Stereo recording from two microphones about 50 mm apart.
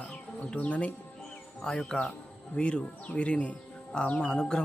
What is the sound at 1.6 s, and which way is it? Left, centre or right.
Speech, centre.